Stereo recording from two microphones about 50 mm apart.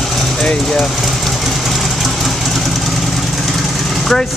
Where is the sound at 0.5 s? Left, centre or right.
Centre.